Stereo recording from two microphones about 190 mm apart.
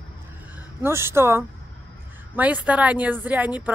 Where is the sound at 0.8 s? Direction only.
15° right (ahead or behind).